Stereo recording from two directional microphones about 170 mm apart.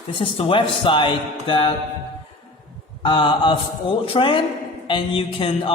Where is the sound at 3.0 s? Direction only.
30° left (ahead or behind).